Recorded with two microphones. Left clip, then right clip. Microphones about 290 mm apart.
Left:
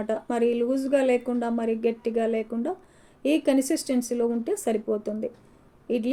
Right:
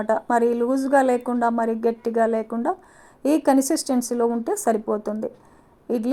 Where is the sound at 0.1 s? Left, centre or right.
Centre.